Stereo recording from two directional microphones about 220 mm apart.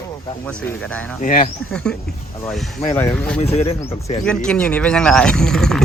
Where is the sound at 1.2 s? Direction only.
40° left (ahead or behind).